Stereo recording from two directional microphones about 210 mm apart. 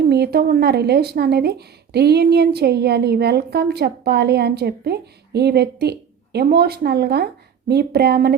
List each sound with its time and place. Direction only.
0.1 s speech: 50° right (ahead or behind)